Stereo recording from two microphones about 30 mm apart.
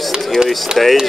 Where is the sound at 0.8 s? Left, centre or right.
Centre.